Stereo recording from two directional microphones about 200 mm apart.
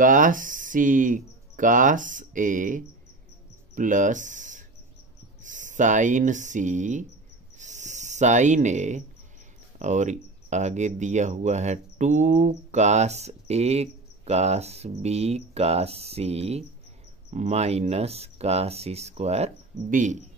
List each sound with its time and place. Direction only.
0.0 s speech: 40° right (ahead or behind)
7.5 s a sound: 35° right (ahead or behind)
9.8 s speech: 35° right (ahead or behind)